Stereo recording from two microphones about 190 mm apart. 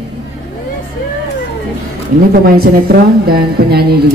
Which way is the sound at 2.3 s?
55° right (ahead or behind).